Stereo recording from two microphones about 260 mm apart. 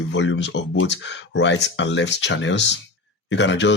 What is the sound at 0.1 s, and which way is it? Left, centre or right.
Speech, left.